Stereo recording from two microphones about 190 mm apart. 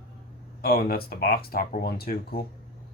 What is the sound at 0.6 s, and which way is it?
Speech, 50° left (ahead or behind).